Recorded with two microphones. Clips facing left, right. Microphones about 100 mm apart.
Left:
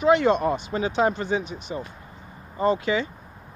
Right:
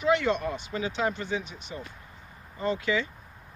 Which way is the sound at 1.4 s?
20° left (ahead or behind).